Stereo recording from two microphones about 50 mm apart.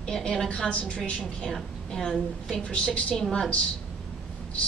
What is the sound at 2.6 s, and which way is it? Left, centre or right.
Speech, left.